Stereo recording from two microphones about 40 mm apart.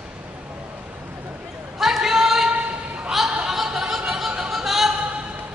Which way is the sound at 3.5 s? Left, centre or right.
Centre.